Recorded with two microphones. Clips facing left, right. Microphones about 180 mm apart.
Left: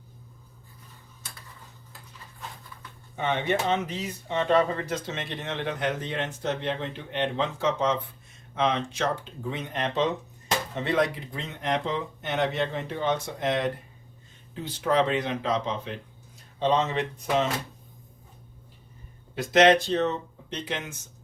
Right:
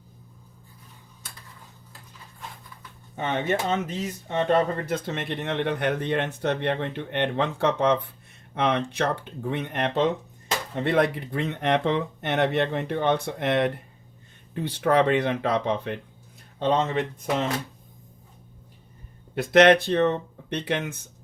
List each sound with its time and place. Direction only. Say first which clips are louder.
3.2 s speech: right 1 dB; 45° right (ahead or behind)
19.4 s speech: right 2 dB; 60° right (ahead or behind)